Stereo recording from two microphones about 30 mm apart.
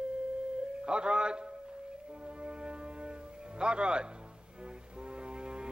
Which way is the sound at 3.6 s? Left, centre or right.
Right.